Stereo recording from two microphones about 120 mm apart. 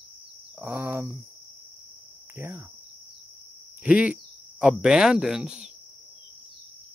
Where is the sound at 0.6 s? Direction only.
20° right (ahead or behind).